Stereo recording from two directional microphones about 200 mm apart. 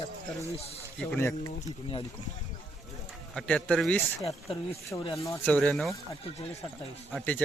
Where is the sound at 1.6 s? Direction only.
35° left (ahead or behind).